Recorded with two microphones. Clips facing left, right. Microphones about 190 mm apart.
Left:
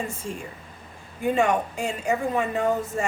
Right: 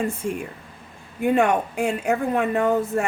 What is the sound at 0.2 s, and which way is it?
Speech, 60° right (ahead or behind).